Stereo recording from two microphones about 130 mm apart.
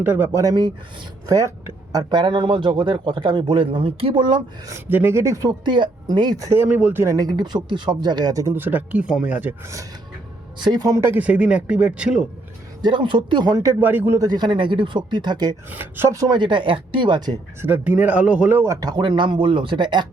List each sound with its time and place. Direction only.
0.0 s speech: 15° right (ahead or behind)
0.4 s speech: 30° right (ahead or behind)
4.7 s speech: 15° right (ahead or behind)
10.6 s speech: 35° right (ahead or behind); by 12.2 s 10° right (ahead or behind)
12.8 s speech: 35° right (ahead or behind); by 14.2 s 15° right (ahead or behind)
14.2 s speech: 30° right (ahead or behind)
15.7 s speech: 15° right (ahead or behind)
16.3 s speech: 35° right (ahead or behind)
17.6 s speech: 15° right (ahead or behind); by 20.1 s 35° right (ahead or behind)